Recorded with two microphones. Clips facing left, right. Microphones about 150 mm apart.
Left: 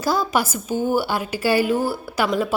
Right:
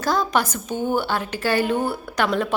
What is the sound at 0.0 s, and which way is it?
A woman's voice, 10° left (ahead or behind).